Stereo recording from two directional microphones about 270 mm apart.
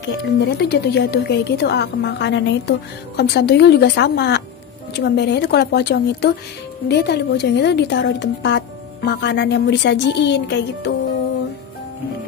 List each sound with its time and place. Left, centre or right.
0.2 s a woman's voice: left